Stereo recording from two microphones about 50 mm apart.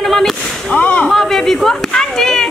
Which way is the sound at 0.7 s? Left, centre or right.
Left.